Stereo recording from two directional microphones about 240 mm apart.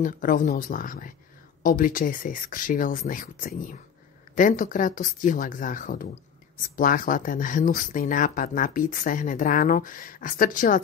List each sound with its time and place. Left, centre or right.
0.0 s speech: left